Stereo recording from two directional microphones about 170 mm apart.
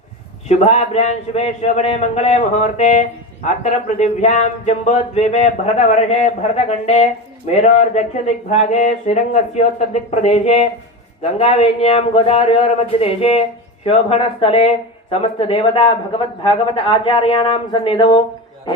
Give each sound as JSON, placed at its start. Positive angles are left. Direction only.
{"t": 0.4, "sound": "speech", "side_deg": 40}